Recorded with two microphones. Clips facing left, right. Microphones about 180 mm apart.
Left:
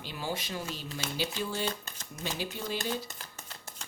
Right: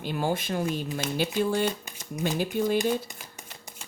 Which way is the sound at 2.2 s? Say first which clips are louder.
Right 10 dB; 55° right (ahead or behind).